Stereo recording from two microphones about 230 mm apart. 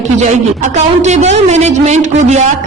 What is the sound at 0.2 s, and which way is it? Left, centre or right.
A man's voice, right.